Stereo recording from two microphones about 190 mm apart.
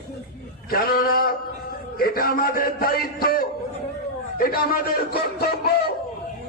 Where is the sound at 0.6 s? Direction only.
50° left (ahead or behind).